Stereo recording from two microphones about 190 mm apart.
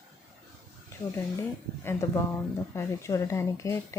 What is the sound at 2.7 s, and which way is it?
Speech, 15° left (ahead or behind).